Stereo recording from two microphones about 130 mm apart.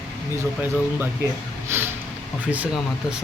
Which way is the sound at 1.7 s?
20° right (ahead or behind).